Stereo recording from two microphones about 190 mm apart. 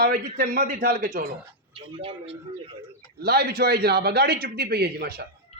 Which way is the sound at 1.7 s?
30° right (ahead or behind).